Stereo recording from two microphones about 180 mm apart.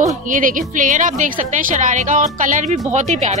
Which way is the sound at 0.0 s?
50° right (ahead or behind).